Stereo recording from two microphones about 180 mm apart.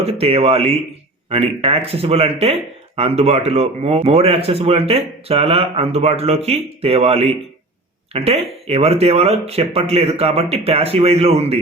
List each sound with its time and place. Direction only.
0.0 s speech: 35° right (ahead or behind)